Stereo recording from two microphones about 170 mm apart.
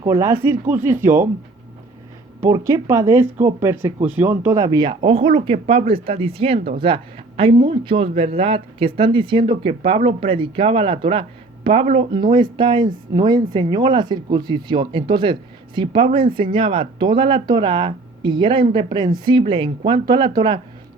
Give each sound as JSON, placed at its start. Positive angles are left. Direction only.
{"t": 0.0, "sound": "speech", "side_deg": -20}
{"t": 2.4, "sound": "speech", "side_deg": -15}